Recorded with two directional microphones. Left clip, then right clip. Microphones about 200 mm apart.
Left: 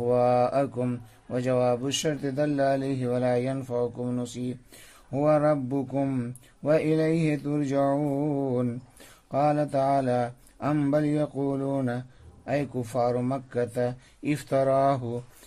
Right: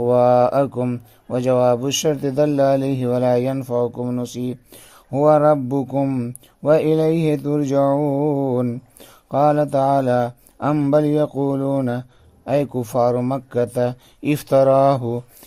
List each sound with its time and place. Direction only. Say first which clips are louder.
0.0 s speech: right 8 dB; 30° right (ahead or behind)